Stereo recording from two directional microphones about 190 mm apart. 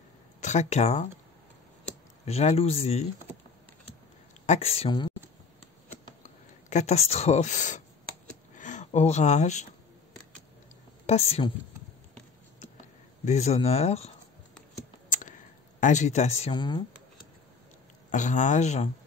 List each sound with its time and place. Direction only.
0.4 s speech: 35° left (ahead or behind)
2.2 s speech: 35° left (ahead or behind)
4.5 s speech: 35° left (ahead or behind)
6.2 s speech: 35° left (ahead or behind)
11.1 s speech: 35° left (ahead or behind)
13.2 s speech: 35° left (ahead or behind)
15.0 s a sound: 40° left (ahead or behind); by 16.8 s 25° left (ahead or behind)
18.1 s speech: 40° left (ahead or behind)